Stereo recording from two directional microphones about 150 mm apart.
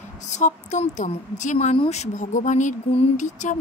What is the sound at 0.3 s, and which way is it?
Speech, 55° left (ahead or behind).